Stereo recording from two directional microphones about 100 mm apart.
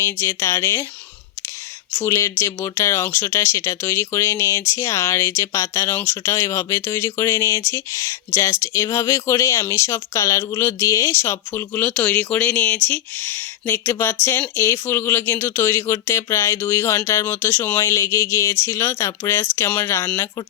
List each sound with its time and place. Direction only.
0.0 s speech: 25° left (ahead or behind)
2.0 s speech: 30° left (ahead or behind)